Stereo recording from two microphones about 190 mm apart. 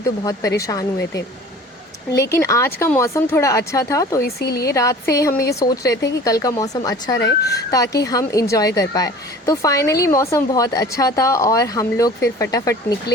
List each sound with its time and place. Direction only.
0.0 s a woman's voice: 15° left (ahead or behind)
2.2 s a woman's voice: 15° left (ahead or behind)
4.2 s a woman's voice: 55° left (ahead or behind)
4.6 s a woman's voice: 15° left (ahead or behind)